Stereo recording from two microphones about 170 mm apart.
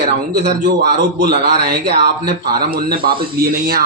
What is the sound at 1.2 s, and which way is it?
Speech, 75° right (ahead or behind).